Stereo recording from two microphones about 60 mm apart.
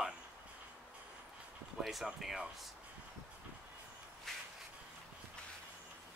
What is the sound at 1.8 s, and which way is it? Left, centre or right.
Speech, centre.